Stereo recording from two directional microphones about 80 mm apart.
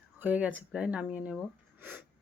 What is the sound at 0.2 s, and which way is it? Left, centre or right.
Speech, centre.